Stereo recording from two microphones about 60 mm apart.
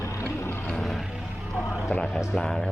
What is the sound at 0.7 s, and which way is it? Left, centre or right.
Vehicle, centre.